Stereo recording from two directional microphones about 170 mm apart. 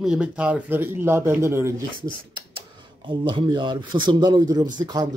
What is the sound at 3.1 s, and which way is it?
Speech, 30° right (ahead or behind).